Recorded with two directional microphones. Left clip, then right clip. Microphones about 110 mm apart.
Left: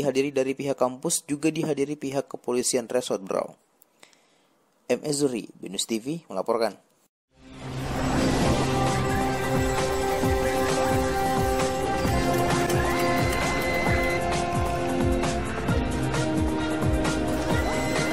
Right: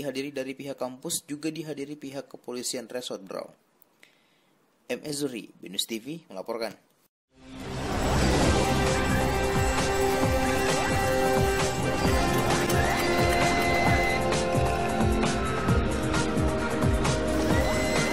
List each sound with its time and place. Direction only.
0.0 s speech: 55° left (ahead or behind)
4.8 s speech: 50° left (ahead or behind)
7.4 s music: centre (ahead or behind)